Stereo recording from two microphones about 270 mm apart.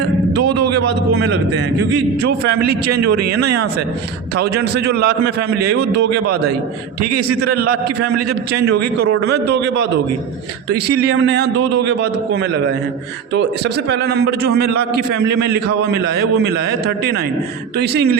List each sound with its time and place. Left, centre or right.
0.3 s a man's voice: right
1.1 s a man's voice: right
4.4 s a man's voice: right
7.4 s a man's voice: right
14.7 s a man's voice: right
15.2 s a man's voice: right